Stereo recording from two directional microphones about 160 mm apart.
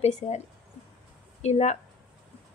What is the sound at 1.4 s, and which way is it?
Speech, 45° left (ahead or behind).